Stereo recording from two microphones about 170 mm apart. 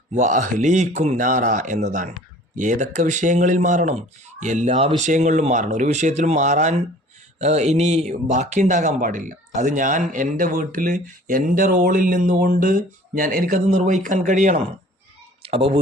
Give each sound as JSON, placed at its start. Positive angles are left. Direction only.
{"t": 0.1, "sound": "a man's voice", "side_deg": -45}
{"t": 15.4, "sound": "speech", "side_deg": -35}